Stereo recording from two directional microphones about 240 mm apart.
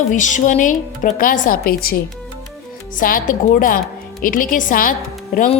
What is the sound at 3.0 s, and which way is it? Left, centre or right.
A woman's voice, left.